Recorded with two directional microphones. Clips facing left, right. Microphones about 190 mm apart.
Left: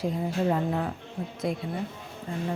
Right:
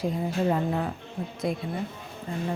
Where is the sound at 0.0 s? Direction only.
10° right (ahead or behind).